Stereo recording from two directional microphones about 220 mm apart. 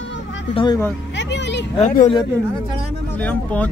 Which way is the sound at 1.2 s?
55° left (ahead or behind).